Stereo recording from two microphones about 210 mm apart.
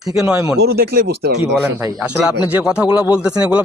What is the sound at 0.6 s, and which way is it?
Speech, 50° right (ahead or behind).